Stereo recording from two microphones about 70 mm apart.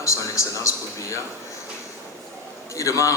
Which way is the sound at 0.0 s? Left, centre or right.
Left.